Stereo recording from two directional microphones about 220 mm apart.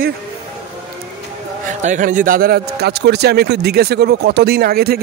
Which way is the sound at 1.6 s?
35° right (ahead or behind).